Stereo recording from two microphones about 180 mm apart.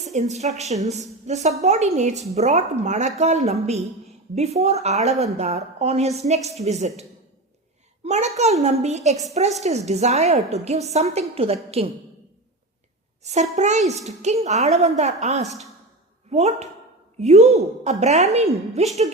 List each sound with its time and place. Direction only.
0.0 s a woman's voice: 40° right (ahead or behind)
8.0 s a woman's voice: 40° right (ahead or behind)
13.2 s a woman's voice: 40° right (ahead or behind)